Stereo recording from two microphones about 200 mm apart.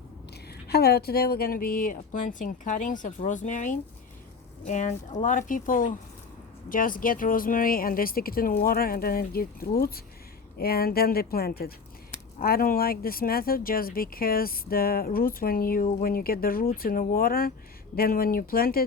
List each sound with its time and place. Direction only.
0.7 s speech: 50° left (ahead or behind)